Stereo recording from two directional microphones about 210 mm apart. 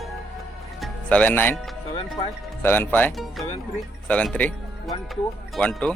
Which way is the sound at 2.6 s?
10° left (ahead or behind).